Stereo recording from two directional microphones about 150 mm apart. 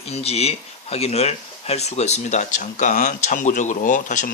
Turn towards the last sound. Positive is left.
turn(degrees=55)  # may be behind; listen again after turning